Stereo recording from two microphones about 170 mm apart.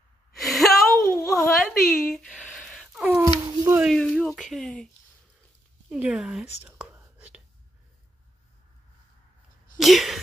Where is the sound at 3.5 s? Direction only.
25° right (ahead or behind).